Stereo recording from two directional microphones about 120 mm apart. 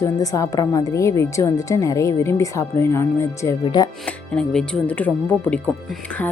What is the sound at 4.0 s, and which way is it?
Speech, 5° left (ahead or behind).